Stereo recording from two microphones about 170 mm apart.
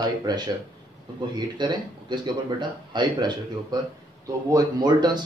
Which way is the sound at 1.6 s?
25° right (ahead or behind).